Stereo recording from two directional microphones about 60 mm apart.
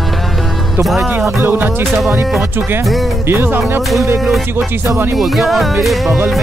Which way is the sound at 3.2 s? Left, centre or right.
Right.